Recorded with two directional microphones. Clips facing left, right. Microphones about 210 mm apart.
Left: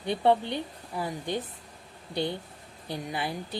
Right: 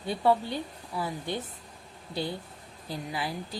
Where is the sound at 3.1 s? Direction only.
25° left (ahead or behind).